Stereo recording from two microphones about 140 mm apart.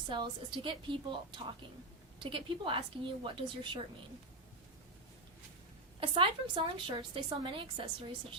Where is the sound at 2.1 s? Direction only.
35° right (ahead or behind).